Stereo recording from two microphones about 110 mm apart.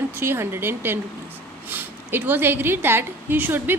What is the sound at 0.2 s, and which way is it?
A woman's voice, 20° right (ahead or behind).